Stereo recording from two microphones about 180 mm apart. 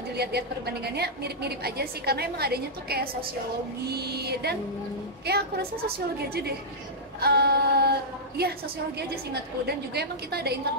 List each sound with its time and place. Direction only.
0.1 s a woman's voice: 65° right (ahead or behind)